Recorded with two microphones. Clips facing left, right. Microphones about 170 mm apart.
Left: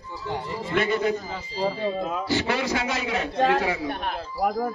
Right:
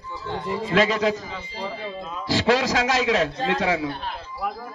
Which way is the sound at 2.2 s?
90° right.